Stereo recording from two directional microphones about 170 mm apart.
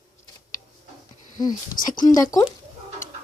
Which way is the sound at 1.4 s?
25° left (ahead or behind).